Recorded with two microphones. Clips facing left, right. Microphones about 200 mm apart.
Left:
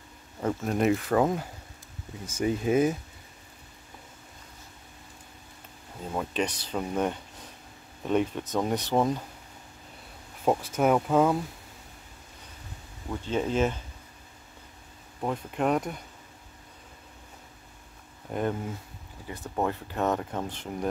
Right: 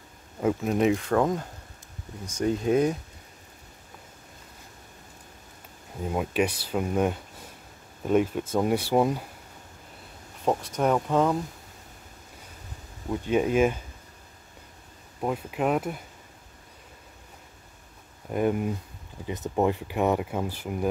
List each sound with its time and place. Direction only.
0.4 s speech: 5° right (ahead or behind)
6.1 s speech: 10° right (ahead or behind)
10.4 s speech: 5° left (ahead or behind)
13.2 s speech: 15° right (ahead or behind)
15.1 s speech: 5° right (ahead or behind)
18.3 s speech: 10° right (ahead or behind)